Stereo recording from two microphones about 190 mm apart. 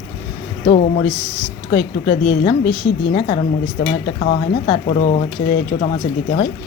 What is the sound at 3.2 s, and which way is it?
Speech, 30° left (ahead or behind).